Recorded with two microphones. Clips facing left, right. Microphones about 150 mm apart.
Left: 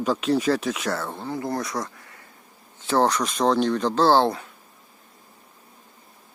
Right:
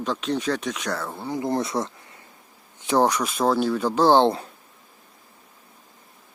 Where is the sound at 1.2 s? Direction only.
20° right (ahead or behind).